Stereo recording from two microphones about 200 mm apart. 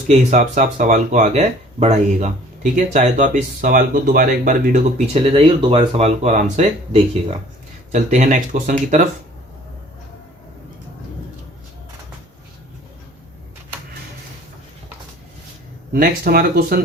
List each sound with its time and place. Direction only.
0.1 s speech: 35° right (ahead or behind)
15.9 s speech: 50° right (ahead or behind)